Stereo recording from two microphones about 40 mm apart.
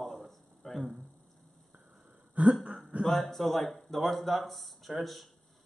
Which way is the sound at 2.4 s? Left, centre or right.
Right.